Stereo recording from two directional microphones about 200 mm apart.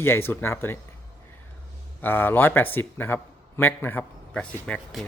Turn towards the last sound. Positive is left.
turn(degrees=5)  # may be behind; listen again after turning